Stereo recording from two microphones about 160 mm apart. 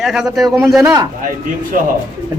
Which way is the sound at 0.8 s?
20° right (ahead or behind).